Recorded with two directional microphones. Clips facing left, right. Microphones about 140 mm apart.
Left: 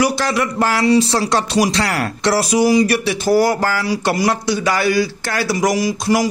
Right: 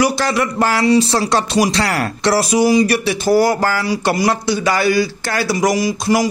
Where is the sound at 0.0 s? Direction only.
30° right (ahead or behind).